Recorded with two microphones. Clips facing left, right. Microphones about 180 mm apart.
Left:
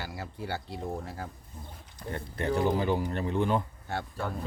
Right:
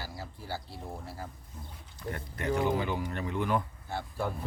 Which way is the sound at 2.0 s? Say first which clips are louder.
Left 2 dB; 30° left (ahead or behind).